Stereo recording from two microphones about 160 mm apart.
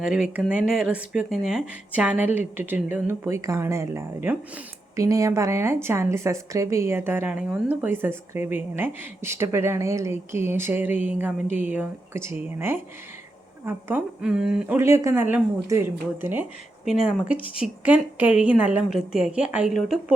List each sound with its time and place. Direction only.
0.0 s a woman's voice: 5° right (ahead or behind)